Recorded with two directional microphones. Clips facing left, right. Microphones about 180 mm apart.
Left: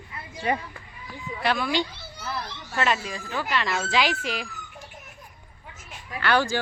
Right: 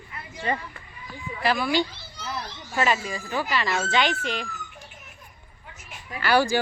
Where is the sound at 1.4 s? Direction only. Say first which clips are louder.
Right 2 dB; 5° right (ahead or behind).